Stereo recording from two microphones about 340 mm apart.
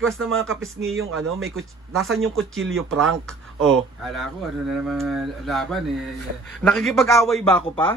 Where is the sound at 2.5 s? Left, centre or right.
Right.